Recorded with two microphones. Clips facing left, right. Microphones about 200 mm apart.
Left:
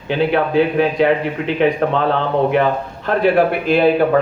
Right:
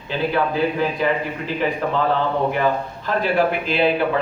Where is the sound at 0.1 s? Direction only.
70° left (ahead or behind).